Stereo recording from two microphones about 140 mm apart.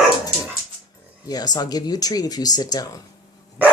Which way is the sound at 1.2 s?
30° left (ahead or behind).